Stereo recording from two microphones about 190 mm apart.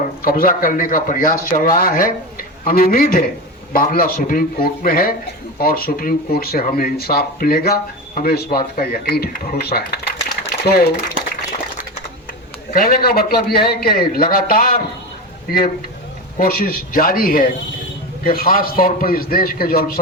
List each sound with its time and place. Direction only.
0.2 s speech: 45° left (ahead or behind)
12.7 s speech: 50° left (ahead or behind)
16.4 s speech: 50° left (ahead or behind)